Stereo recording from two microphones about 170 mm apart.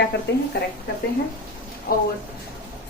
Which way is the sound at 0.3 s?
85° left.